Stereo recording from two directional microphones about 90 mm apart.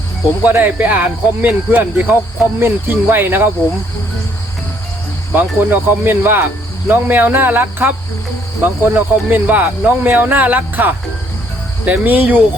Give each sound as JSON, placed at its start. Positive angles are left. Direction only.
{"t": 0.4, "sound": "speech", "side_deg": -20}
{"t": 5.3, "sound": "speech", "side_deg": -20}
{"t": 9.0, "sound": "speech", "side_deg": -20}